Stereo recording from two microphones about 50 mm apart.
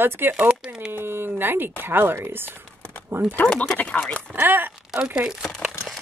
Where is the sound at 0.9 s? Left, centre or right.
Right.